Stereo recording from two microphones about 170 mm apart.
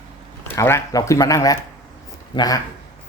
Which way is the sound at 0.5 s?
15° left (ahead or behind).